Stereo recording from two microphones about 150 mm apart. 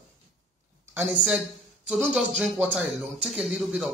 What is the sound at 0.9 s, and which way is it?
A woman's voice, 15° right (ahead or behind).